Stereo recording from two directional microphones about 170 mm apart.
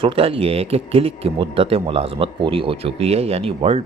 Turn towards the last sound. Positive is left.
turn(degrees=-35)  # may be behind; listen again after turning